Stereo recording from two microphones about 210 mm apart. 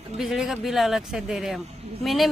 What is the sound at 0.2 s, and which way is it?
Speech, centre (ahead or behind).